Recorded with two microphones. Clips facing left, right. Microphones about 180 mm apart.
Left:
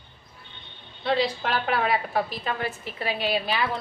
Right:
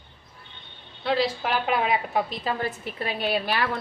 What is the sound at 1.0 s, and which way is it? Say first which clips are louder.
A woman's voice: even; 5° right (ahead or behind).